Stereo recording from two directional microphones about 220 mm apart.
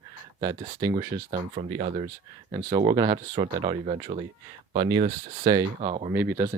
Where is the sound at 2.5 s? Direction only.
15° right (ahead or behind).